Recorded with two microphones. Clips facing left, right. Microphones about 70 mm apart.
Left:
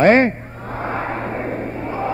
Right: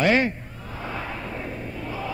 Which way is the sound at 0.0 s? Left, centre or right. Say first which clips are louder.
Left 8 dB; left.